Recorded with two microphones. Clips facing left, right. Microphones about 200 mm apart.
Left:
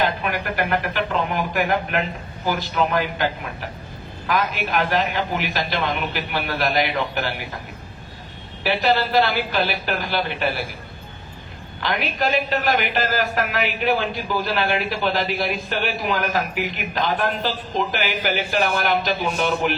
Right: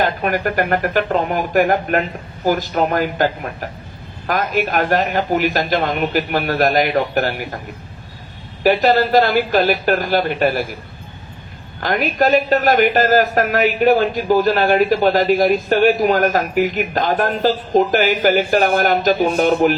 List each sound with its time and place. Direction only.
0.0 s a man's voice: 45° right (ahead or behind)
8.6 s a man's voice: 45° right (ahead or behind)
11.8 s a man's voice: 45° right (ahead or behind)